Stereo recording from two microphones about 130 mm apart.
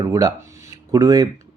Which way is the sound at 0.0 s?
30° right (ahead or behind).